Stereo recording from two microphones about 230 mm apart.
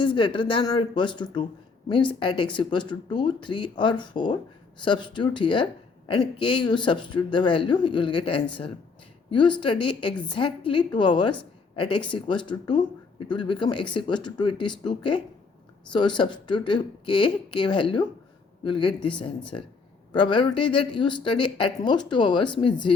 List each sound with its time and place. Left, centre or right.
0.0 s speech: left